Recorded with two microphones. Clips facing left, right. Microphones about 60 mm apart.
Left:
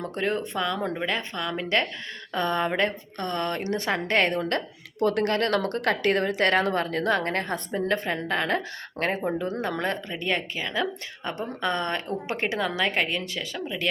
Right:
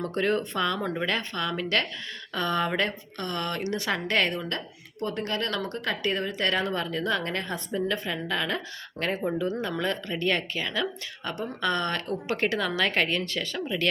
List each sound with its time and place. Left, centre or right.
0.0 s a woman's voice: centre; by 4.6 s left
5.0 s speech: left
10.1 s a woman's voice: centre